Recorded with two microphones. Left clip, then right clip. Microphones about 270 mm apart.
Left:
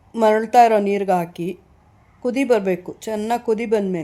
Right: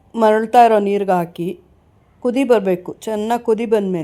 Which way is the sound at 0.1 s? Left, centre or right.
Centre.